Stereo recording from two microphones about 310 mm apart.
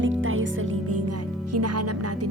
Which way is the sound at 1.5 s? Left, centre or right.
Right.